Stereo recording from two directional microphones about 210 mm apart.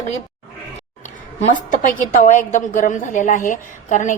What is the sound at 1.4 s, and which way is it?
A woman's voice, 35° left (ahead or behind).